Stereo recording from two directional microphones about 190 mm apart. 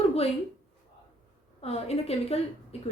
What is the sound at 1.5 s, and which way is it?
A woman's voice, 30° left (ahead or behind).